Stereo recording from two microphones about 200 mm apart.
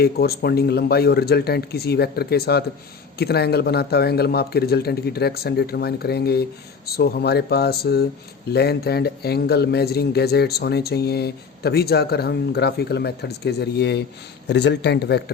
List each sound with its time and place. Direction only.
0.0 s speech: 50° left (ahead or behind)